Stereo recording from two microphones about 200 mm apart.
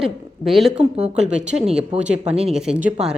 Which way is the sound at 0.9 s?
30° right (ahead or behind).